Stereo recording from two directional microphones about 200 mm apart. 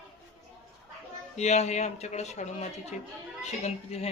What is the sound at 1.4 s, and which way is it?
Speech, 35° left (ahead or behind).